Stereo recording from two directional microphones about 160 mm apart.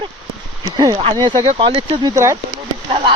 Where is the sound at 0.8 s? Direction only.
30° right (ahead or behind).